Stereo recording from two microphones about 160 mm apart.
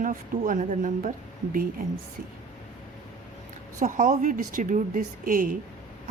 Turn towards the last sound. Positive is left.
turn(degrees=-60)  # may be behind; listen again after turning